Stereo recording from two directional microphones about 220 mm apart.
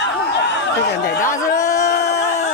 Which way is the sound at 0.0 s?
50° left (ahead or behind).